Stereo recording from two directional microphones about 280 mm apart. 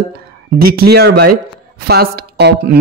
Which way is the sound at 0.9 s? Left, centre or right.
Right.